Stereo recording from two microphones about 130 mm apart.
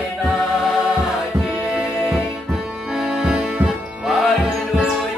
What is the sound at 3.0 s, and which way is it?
Music, 5° right (ahead or behind).